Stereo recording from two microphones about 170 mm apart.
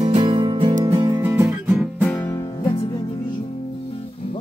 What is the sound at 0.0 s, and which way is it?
Music, 25° right (ahead or behind).